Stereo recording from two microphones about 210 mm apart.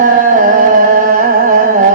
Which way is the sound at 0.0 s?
40° right (ahead or behind).